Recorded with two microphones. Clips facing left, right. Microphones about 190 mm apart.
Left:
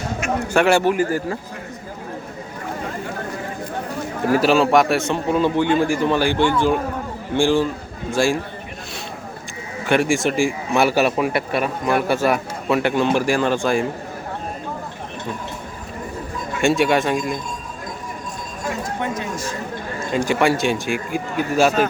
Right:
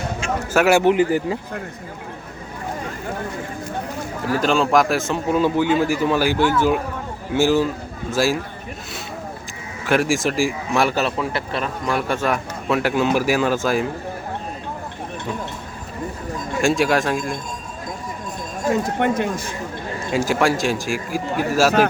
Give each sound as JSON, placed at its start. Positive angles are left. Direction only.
{"t": 0.4, "sound": "a man's voice", "side_deg": -5}
{"t": 0.9, "sound": "speech", "side_deg": -20}
{"t": 4.4, "sound": "a man's voice", "side_deg": 5}
{"t": 9.8, "sound": "a man's voice", "side_deg": 0}
{"t": 16.6, "sound": "a man's voice", "side_deg": 0}
{"t": 18.9, "sound": "speech", "side_deg": -60}
{"t": 20.1, "sound": "a man's voice", "side_deg": 0}